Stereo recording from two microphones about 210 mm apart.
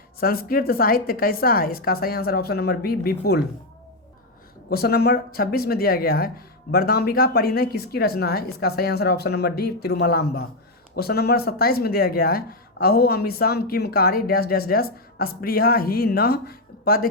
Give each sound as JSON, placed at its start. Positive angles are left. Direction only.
{"t": 0.2, "sound": "speech", "side_deg": 45}
{"t": 4.7, "sound": "speech", "side_deg": 45}